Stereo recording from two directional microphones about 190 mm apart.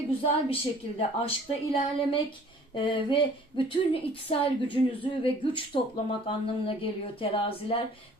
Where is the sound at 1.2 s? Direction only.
30° left (ahead or behind).